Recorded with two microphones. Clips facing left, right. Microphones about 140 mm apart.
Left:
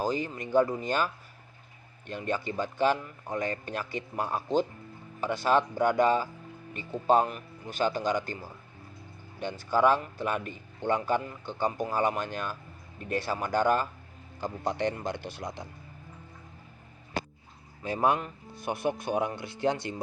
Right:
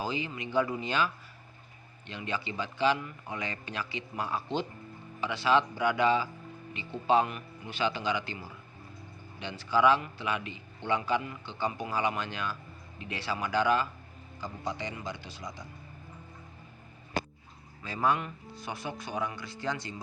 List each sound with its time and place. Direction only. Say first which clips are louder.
0.0 s a man's voice: left 4 dB; 45° left (ahead or behind)
14.4 s speech: left 7 dB; 60° left (ahead or behind)
17.8 s speech: left 3 dB; 55° left (ahead or behind)